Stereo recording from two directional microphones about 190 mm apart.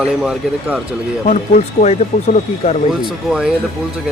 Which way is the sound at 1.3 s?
40° left (ahead or behind).